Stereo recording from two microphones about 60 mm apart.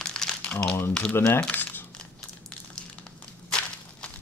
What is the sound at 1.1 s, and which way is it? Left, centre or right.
Speech, left.